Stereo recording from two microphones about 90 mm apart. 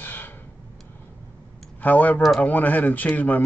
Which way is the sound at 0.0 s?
20° left (ahead or behind).